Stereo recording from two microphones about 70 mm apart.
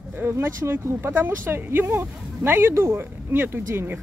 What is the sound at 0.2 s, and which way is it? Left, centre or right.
Speech, right.